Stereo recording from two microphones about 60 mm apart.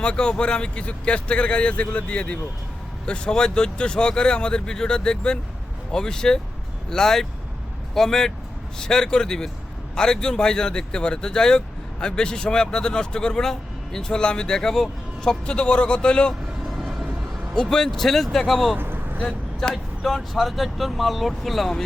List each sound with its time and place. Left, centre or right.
0.0 s speech: centre
16.6 s vehicle: centre
17.5 s speech: centre
18.8 s vehicle: right
19.5 s speech: centre